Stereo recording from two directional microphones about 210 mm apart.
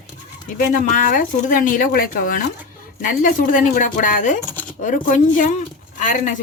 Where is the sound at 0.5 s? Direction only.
40° left (ahead or behind).